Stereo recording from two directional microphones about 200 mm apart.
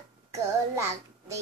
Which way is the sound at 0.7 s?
15° right (ahead or behind).